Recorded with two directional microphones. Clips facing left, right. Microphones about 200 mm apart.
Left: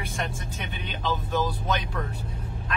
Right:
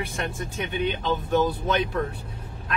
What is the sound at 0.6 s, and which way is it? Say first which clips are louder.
Speech: right 9 dB; 55° right (ahead or behind).